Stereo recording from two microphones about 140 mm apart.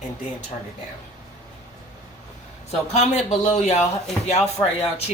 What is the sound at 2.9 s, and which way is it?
A man's voice, 50° left (ahead or behind).